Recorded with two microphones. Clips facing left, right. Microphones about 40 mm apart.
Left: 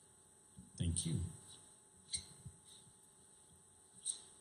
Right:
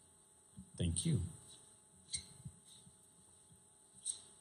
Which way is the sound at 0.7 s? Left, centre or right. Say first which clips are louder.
Right 2 dB; right.